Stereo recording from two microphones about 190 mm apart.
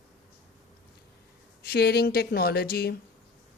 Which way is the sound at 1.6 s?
55° left (ahead or behind).